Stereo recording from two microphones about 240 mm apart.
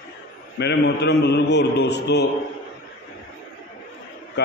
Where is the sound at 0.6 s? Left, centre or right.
Left.